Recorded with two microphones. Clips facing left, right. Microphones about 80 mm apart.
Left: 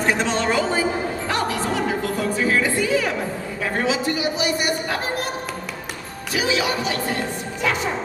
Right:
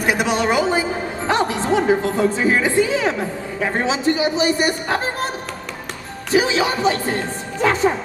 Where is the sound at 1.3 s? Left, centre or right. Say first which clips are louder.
Right 7 dB; right.